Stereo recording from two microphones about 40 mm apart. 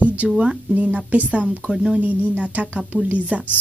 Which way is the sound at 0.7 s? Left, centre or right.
Right.